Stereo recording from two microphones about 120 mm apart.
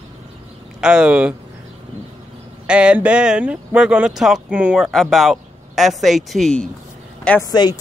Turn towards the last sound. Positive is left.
turn(degrees=35)  # may be behind; listen again after turning